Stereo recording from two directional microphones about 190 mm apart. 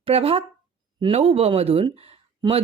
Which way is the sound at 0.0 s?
30° right (ahead or behind).